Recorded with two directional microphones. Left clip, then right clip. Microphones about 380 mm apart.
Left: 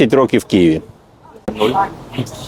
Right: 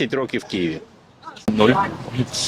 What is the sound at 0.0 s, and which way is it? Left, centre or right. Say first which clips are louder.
Speech: left 11 dB; left.